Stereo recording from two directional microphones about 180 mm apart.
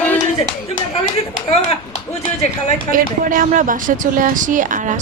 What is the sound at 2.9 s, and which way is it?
Speech, 50° right (ahead or behind).